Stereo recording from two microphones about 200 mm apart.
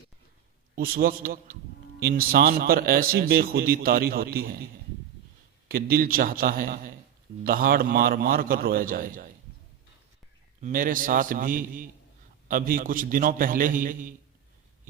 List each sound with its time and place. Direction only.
0.8 s a man's voice: 45° right (ahead or behind)
5.6 s a man's voice: 50° right (ahead or behind)
10.6 s a man's voice: 45° right (ahead or behind)